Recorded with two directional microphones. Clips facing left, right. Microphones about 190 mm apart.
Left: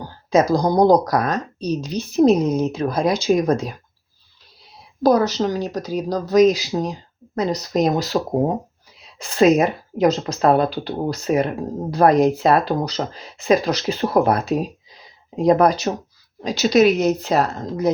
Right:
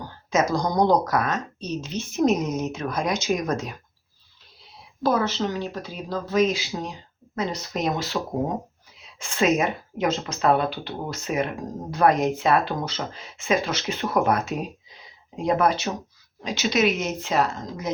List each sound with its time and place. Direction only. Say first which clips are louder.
0.1 s speech: left 6 dB; 35° left (ahead or behind)
5.0 s speech: left 6 dB; 40° left (ahead or behind)